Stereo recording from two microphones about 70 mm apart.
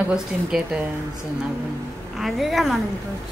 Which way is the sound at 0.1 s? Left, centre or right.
Centre.